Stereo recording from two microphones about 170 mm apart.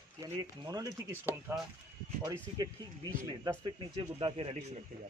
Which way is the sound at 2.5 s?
25° right (ahead or behind).